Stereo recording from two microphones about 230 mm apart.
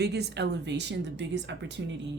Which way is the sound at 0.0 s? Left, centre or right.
Right.